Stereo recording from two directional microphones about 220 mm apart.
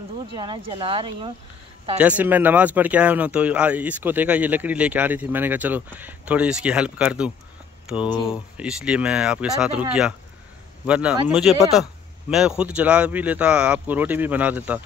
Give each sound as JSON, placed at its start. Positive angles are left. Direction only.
{"t": 0.4, "sound": "speech", "side_deg": -20}
{"t": 2.0, "sound": "speech", "side_deg": -5}
{"t": 10.9, "sound": "speech", "side_deg": -5}